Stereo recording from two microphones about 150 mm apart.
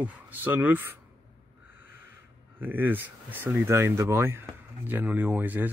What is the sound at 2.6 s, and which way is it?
Speech, 10° right (ahead or behind).